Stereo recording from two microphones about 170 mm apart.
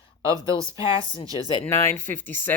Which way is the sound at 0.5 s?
30° left (ahead or behind).